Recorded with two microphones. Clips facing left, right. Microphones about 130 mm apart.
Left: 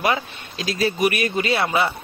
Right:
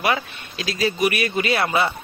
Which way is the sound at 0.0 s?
25° left (ahead or behind).